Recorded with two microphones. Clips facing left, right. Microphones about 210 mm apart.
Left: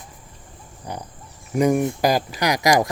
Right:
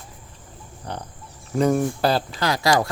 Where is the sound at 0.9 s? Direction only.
10° left (ahead or behind).